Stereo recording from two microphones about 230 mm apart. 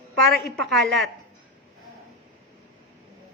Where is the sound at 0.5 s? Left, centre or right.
Centre.